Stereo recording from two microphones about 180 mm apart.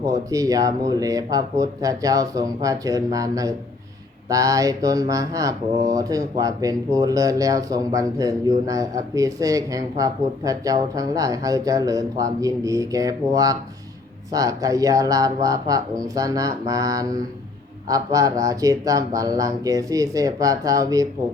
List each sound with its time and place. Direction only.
0.0 s speech: 20° right (ahead or behind)